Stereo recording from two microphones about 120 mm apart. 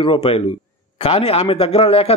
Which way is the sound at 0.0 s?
50° left (ahead or behind).